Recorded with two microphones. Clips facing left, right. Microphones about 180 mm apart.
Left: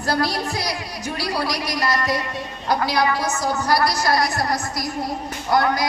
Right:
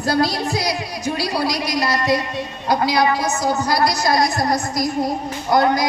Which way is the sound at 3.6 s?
15° right (ahead or behind).